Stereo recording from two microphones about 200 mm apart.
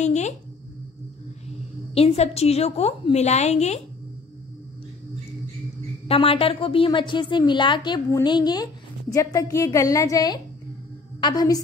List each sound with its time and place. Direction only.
0.0 s speech: 35° left (ahead or behind)
2.0 s a woman's voice: 30° left (ahead or behind)
6.0 s a woman's voice: 30° left (ahead or behind)